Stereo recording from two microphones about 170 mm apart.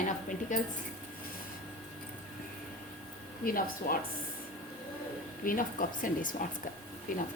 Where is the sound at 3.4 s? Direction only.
60° left (ahead or behind).